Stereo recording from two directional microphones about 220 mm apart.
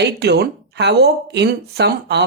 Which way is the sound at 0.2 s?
50° right (ahead or behind).